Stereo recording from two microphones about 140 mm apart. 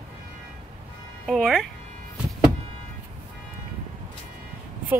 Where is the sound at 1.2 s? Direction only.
Centre (ahead or behind).